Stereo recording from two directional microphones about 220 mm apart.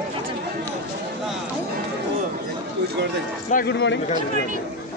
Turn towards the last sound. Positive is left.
turn(degrees=50)  # may be behind; listen again after turning